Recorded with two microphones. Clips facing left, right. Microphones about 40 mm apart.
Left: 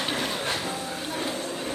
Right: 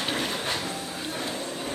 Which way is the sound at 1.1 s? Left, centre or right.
Centre.